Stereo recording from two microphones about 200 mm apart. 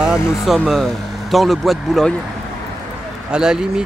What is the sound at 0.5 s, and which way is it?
Speech, centre (ahead or behind).